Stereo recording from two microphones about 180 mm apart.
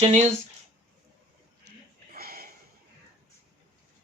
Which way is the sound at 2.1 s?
55° right (ahead or behind).